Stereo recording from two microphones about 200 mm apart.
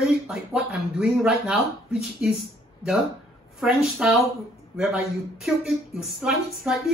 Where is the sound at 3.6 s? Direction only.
5° right (ahead or behind).